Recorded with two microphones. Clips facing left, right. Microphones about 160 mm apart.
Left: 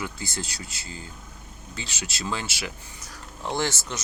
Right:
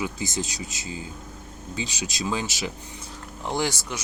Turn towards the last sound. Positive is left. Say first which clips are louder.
# right 1 dB
turn(degrees=-10)  # may be behind; listen again after turning